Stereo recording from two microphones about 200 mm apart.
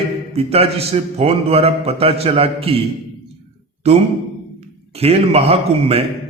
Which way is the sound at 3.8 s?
30° right (ahead or behind).